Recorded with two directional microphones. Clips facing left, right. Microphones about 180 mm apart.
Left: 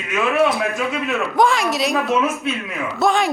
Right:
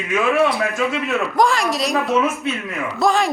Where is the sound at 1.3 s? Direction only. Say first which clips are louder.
Left 1 dB; centre (ahead or behind).